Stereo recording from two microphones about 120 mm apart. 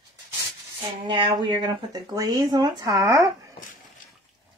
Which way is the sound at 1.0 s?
40° right (ahead or behind).